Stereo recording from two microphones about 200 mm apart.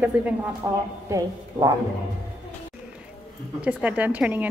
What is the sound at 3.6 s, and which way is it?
Speech, 5° right (ahead or behind).